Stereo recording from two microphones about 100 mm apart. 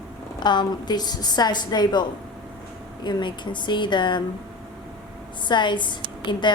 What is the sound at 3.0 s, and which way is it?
A woman's voice, 50° left (ahead or behind).